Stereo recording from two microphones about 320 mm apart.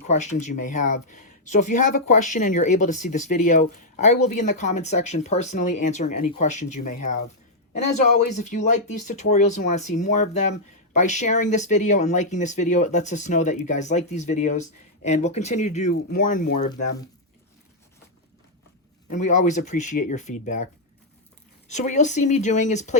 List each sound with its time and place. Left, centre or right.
0.0 s speech: left
19.1 s speech: left
21.7 s speech: left